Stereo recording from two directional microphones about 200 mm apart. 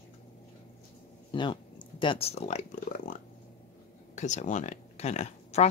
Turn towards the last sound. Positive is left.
turn(degrees=35)  # may be behind; listen again after turning